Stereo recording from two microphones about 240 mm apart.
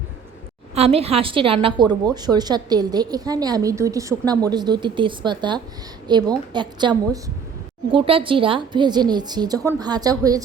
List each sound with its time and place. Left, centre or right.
0.8 s a woman's voice: right